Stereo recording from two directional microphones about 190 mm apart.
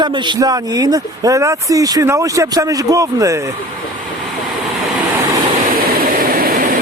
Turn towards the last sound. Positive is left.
turn(degrees=-45)  # may be behind; listen again after turning